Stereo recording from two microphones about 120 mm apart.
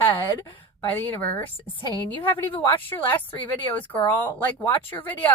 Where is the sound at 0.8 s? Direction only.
20° left (ahead or behind).